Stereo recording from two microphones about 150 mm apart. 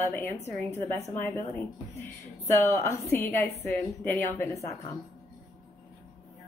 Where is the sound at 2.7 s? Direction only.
20° left (ahead or behind).